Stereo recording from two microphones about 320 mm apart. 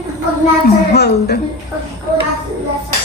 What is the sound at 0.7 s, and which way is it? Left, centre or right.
Speech, left.